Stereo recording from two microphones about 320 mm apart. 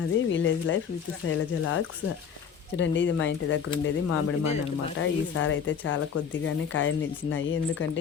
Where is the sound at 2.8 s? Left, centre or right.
Left.